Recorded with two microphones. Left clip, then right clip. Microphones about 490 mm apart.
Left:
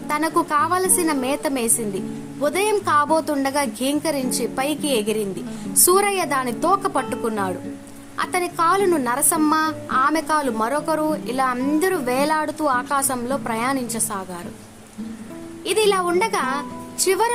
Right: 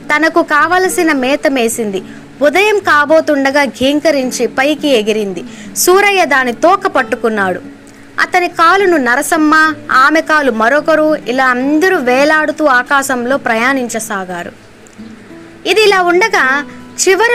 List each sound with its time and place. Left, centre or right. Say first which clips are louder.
0.1 s a woman's voice: right 10 dB; left
15.6 s a woman's voice: right 10 dB; left